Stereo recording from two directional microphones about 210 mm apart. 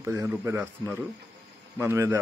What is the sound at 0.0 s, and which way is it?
Speech, 15° right (ahead or behind).